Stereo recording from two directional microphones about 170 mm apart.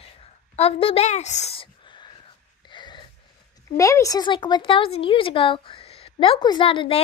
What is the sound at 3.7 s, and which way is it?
Speech, 20° left (ahead or behind).